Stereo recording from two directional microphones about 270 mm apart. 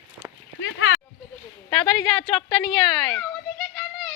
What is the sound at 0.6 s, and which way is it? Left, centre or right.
Speech, left.